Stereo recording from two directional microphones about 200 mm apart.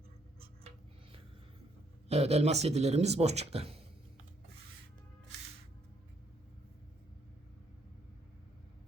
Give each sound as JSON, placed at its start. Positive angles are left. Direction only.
{"t": 2.0, "sound": "speech", "side_deg": -30}